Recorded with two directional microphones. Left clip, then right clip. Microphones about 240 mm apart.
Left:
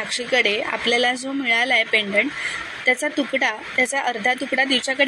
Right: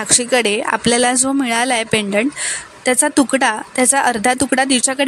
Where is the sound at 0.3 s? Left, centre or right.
Right.